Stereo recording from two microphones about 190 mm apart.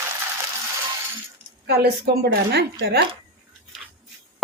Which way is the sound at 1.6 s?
60° right (ahead or behind).